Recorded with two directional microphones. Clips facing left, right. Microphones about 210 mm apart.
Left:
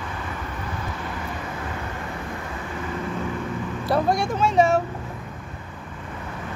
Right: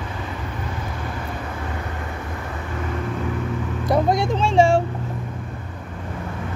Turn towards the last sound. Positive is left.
turn(degrees=-30)  # may be behind; listen again after turning